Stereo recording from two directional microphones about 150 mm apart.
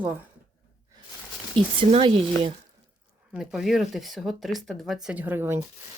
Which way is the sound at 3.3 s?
5° right (ahead or behind).